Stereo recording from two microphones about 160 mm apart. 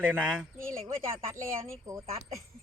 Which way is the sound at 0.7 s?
20° right (ahead or behind).